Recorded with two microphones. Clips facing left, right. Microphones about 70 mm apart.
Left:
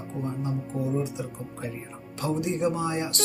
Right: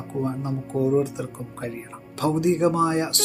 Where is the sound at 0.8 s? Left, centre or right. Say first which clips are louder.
Right 8 dB; right.